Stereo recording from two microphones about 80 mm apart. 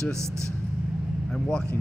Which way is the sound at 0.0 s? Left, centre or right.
Right.